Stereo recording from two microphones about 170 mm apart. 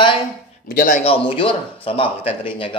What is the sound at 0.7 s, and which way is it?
Speech, 55° left (ahead or behind).